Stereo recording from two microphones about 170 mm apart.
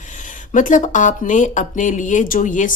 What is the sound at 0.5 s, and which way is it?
Speech, 50° left (ahead or behind).